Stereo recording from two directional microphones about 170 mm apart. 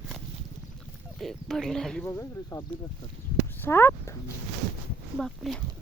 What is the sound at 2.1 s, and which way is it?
Speech, 15° left (ahead or behind).